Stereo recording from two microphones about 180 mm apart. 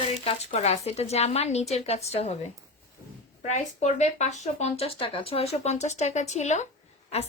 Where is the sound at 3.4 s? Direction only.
40° left (ahead or behind).